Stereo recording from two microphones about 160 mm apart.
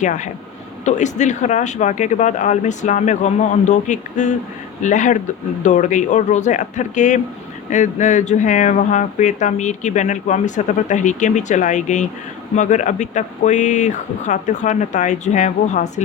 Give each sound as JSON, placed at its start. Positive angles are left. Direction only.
{"t": 0.0, "sound": "speech", "side_deg": 50}